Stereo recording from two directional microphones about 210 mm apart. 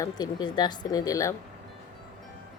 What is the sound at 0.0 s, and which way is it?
Speech, 20° left (ahead or behind).